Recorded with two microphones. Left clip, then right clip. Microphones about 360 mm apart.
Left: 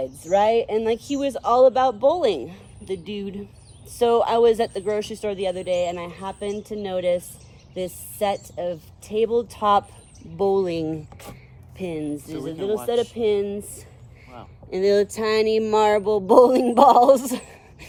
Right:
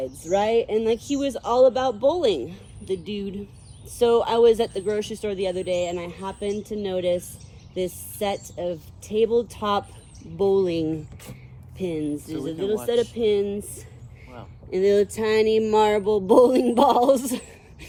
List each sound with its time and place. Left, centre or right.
0.3 s speech: centre